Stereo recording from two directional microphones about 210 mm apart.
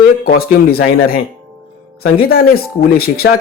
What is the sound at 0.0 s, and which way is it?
Speech, 45° left (ahead or behind).